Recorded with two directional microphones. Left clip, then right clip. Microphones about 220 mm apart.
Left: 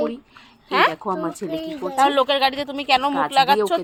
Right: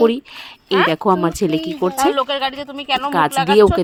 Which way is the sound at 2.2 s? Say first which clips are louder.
Left 1 dB; 15° left (ahead or behind).